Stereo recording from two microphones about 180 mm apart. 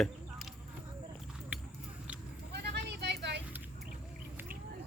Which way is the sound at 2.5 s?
65° right (ahead or behind).